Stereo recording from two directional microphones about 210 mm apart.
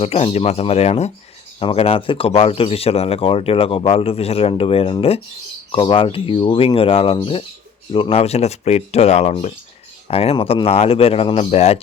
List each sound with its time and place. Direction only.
0.0 s speech: 30° left (ahead or behind)